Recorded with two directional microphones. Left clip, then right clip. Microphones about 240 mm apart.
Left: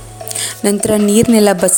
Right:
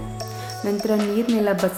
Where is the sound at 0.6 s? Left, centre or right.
Left.